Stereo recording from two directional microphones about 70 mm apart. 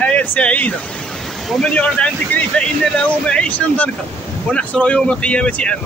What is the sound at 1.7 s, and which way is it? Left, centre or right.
Speech, centre.